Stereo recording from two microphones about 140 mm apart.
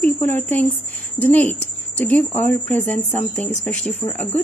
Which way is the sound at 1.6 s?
15° left (ahead or behind).